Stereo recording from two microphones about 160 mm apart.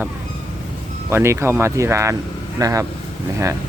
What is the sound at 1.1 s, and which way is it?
Speech, 15° right (ahead or behind).